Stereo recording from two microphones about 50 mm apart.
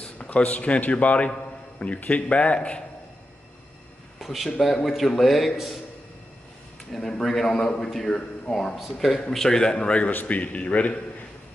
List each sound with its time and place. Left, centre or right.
0.2 s a man's voice: left
4.2 s a sound: centre
4.5 s speech: centre
6.9 s a man's voice: centre; by 11.0 s left